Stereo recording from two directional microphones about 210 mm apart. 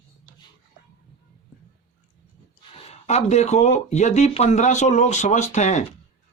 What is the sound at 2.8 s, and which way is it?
Speech, 30° left (ahead or behind).